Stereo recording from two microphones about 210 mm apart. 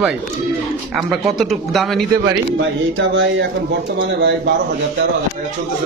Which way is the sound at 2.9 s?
60° right (ahead or behind).